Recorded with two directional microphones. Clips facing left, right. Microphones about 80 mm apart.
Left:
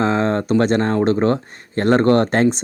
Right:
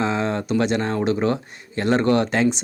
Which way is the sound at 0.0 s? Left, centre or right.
Left.